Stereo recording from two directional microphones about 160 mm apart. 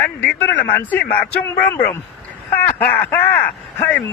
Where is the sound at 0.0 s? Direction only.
10° left (ahead or behind).